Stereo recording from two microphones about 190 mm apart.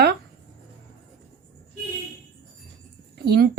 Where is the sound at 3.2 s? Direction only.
55° right (ahead or behind).